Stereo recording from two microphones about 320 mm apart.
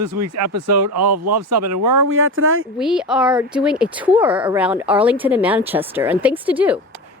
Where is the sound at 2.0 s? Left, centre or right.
Right.